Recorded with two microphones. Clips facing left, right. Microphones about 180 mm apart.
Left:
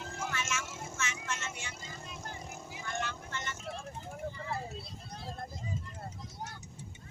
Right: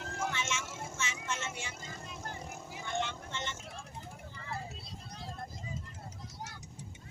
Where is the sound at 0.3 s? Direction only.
30° right (ahead or behind).